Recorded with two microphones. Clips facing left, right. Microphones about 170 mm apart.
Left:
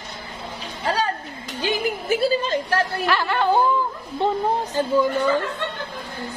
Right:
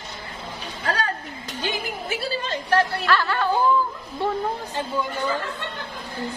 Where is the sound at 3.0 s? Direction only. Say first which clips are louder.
Left 1 dB; 20° left (ahead or behind).